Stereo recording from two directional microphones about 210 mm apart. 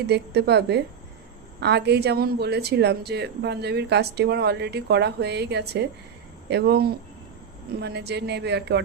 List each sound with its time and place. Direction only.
0.1 s speech: 50° right (ahead or behind)